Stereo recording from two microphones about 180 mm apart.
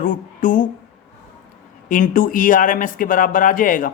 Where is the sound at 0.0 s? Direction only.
50° left (ahead or behind).